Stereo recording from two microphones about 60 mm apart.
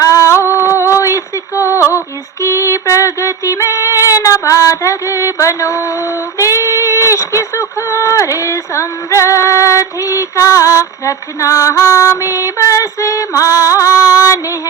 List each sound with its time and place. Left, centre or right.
0.0 s a sound: left
2.4 s female singing: left
6.4 s speech: left